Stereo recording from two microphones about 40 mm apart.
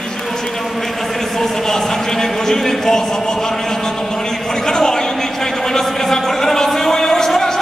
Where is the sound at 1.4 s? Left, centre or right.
Centre.